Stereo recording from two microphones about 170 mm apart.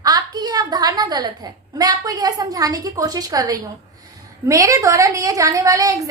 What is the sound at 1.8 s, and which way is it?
A woman's voice, 20° right (ahead or behind).